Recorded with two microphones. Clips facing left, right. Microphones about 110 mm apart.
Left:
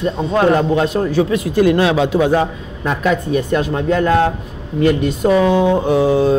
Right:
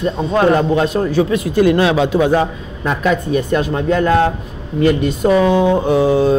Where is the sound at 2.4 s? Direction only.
Centre (ahead or behind).